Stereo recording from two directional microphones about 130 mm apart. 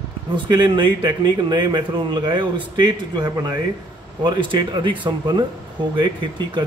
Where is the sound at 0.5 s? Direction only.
35° right (ahead or behind).